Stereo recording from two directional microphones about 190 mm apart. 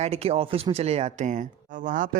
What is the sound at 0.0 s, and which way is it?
Speech, 30° right (ahead or behind).